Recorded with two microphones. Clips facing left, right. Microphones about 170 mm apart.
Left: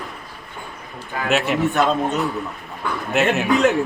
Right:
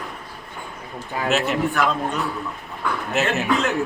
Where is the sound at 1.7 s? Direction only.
25° left (ahead or behind).